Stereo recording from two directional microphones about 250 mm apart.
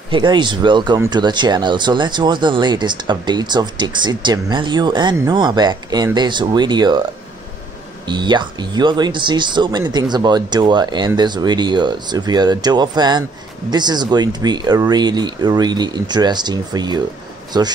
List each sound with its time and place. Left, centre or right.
0.1 s speech: centre
8.1 s speech: centre